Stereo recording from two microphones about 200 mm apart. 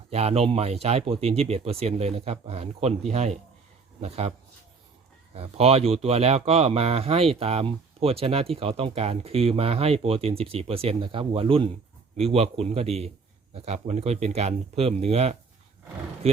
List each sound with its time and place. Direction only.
0.1 s speech: 30° right (ahead or behind)
5.3 s speech: 30° right (ahead or behind)